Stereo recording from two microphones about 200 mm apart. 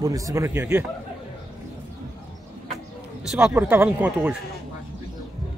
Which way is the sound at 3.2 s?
10° right (ahead or behind).